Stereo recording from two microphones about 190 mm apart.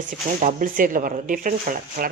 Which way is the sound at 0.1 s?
45° right (ahead or behind).